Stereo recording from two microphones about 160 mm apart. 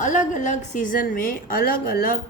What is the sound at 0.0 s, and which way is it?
A woman's voice, 50° left (ahead or behind).